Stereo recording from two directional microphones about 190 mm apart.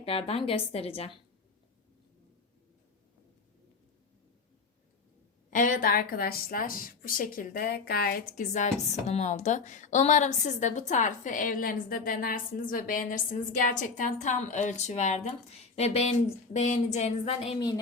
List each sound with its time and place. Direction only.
0.0 s a woman's voice: 30° left (ahead or behind)
5.5 s a woman's voice: 45° left (ahead or behind)
8.3 s a woman's voice: 40° left (ahead or behind)